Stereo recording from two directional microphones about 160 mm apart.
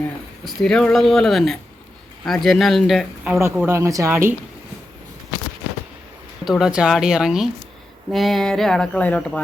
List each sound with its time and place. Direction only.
0.4 s speech: 5° left (ahead or behind)
3.7 s speech: 20° right (ahead or behind)
6.4 s speech: 5° right (ahead or behind)